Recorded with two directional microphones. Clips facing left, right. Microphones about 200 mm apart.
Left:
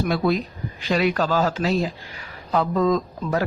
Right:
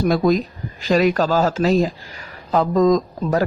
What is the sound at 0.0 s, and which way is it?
Speech, 40° right (ahead or behind).